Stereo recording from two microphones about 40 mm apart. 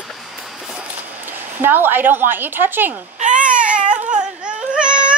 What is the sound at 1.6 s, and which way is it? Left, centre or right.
A woman's voice, right.